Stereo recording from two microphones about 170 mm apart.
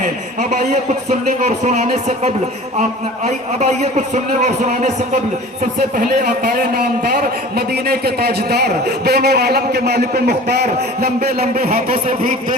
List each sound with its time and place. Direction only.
0.0 s a man's voice: 45° right (ahead or behind)
6.0 s a man's voice: 60° right (ahead or behind)